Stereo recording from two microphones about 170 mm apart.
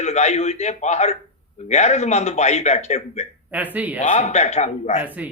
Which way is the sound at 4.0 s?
45° left (ahead or behind).